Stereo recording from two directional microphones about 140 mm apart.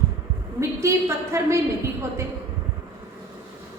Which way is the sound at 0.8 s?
20° right (ahead or behind).